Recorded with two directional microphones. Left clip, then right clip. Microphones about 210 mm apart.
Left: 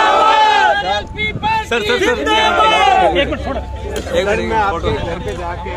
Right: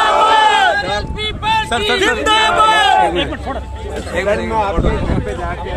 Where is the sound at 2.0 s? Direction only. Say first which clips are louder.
Right 2 dB; 50° right (ahead or behind).